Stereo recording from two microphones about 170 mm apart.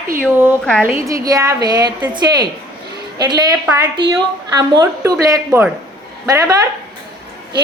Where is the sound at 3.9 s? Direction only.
25° right (ahead or behind).